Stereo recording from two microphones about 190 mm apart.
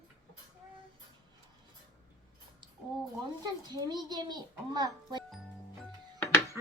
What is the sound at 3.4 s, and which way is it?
A child's voice, 20° right (ahead or behind).